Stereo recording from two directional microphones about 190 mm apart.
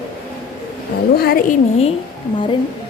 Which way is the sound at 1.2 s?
50° left (ahead or behind).